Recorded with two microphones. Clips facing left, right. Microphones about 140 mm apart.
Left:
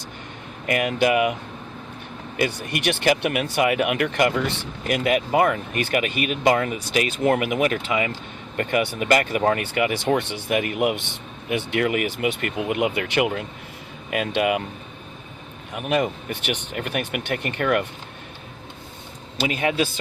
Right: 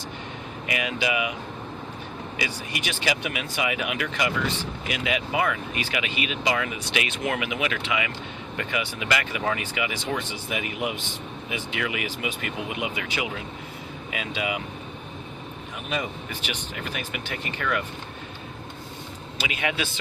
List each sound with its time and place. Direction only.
0.7 s speech: 50° left (ahead or behind)
2.4 s speech: 55° left (ahead or behind); by 8.1 s 40° left (ahead or behind)
8.5 s speech: 50° left (ahead or behind)
15.7 s speech: 60° left (ahead or behind)
19.4 s a man's voice: 35° left (ahead or behind)